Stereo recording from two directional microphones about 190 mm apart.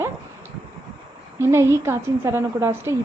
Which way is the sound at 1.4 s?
15° right (ahead or behind).